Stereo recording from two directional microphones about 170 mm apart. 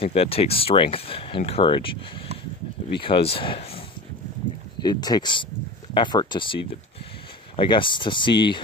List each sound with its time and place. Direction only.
0.0 s speech: 35° left (ahead or behind)
3.0 s speech: 30° left (ahead or behind)
4.8 s speech: 25° left (ahead or behind)